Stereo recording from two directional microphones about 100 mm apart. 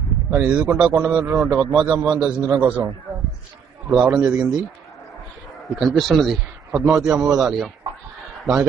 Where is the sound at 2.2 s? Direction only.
15° right (ahead or behind).